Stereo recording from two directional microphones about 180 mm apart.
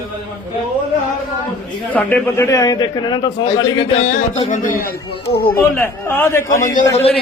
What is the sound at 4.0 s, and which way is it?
Music, 45° left (ahead or behind).